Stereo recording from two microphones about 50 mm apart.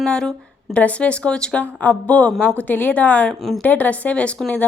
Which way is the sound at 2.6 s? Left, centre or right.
Left.